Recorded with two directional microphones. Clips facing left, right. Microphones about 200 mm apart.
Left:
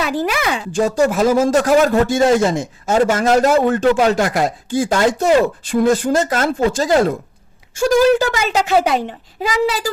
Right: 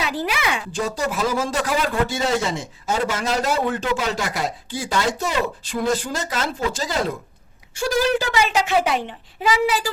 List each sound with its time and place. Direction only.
0.0 s a man's voice: 50° left (ahead or behind)